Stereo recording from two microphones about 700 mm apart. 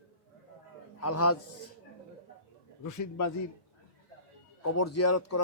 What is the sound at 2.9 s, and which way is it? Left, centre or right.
Speech, left.